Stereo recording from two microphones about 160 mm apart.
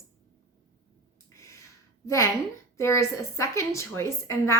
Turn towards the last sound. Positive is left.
turn(degrees=15)  # may be behind; listen again after turning